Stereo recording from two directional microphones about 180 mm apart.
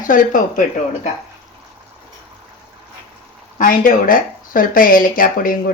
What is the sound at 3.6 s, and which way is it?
Speech, 50° left (ahead or behind).